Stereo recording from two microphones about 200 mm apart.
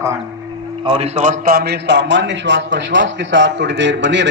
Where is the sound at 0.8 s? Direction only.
30° right (ahead or behind).